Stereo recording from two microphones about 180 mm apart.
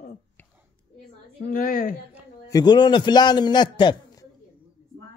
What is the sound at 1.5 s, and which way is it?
Speech, 50° left (ahead or behind).